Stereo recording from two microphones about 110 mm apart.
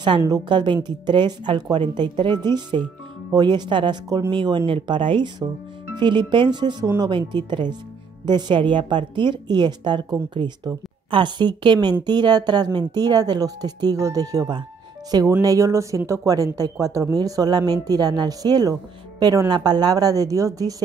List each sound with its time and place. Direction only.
0.5 s speech: 45° right (ahead or behind)